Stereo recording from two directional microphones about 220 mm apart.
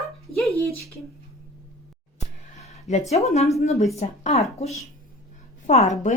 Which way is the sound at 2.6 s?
30° left (ahead or behind).